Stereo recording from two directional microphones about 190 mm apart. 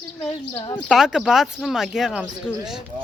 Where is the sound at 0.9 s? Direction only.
5° right (ahead or behind).